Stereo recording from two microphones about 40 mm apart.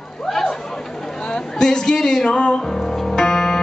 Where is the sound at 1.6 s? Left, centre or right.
Centre.